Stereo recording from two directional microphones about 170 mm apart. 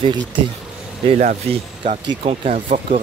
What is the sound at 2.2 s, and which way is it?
Speech, 40° right (ahead or behind).